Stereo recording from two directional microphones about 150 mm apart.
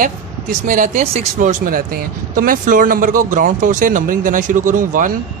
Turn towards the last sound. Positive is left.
turn(degrees=-65)  # may be behind; listen again after turning